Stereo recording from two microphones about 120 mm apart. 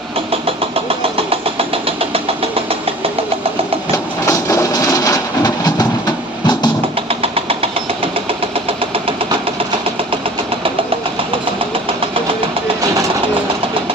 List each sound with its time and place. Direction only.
0.3 s vehicle: 50° right (ahead or behind)
3.9 s train: 25° left (ahead or behind)
7.1 s engine: 55° right (ahead or behind)